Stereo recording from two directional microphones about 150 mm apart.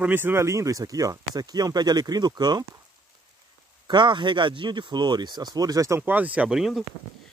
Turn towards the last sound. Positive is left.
turn(degrees=0)  # may be behind; listen again after turning